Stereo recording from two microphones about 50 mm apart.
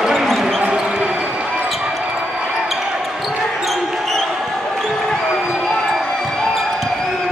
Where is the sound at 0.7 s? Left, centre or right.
Centre.